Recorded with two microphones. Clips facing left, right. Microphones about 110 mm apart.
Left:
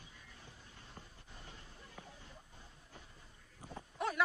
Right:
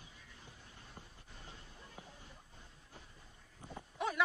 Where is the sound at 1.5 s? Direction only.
15° right (ahead or behind).